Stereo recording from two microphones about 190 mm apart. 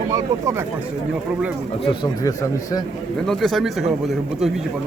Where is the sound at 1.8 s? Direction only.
25° left (ahead or behind).